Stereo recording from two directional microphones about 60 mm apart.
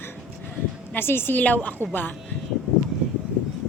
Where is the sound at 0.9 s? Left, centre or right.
Left.